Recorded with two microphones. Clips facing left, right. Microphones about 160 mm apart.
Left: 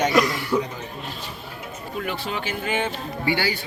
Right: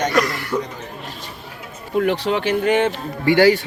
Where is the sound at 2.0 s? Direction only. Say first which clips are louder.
Right 10 dB; 70° right (ahead or behind).